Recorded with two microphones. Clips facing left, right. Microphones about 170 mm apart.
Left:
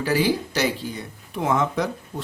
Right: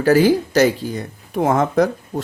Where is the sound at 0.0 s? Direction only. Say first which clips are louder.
Right 8 dB; 45° right (ahead or behind).